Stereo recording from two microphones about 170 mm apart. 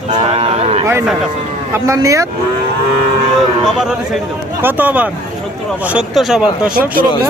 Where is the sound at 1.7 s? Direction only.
20° right (ahead or behind).